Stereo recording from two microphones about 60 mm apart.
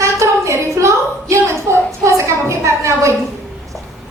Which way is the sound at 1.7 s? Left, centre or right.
Right.